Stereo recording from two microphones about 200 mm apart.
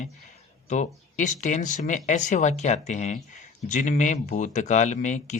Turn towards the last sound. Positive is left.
turn(degrees=40)  # may be behind; listen again after turning